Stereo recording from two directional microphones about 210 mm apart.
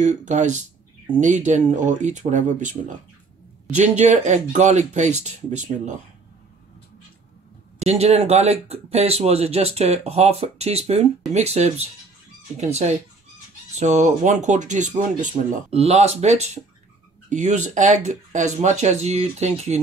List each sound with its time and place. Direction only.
0.0 s speech: 35° right (ahead or behind)
7.8 s speech: 30° right (ahead or behind)